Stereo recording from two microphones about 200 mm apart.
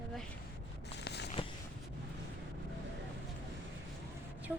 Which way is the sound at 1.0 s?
55° left (ahead or behind).